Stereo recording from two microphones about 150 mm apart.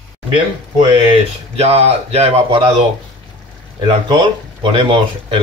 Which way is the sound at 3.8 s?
35° right (ahead or behind).